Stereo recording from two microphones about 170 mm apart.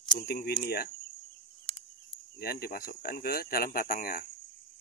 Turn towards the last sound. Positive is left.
turn(degrees=55)  # may be behind; listen again after turning